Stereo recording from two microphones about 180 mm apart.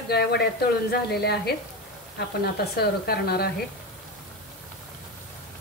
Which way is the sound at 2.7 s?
60° left (ahead or behind).